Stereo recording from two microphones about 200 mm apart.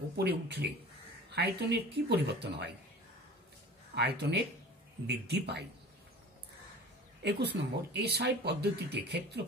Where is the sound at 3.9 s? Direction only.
55° right (ahead or behind).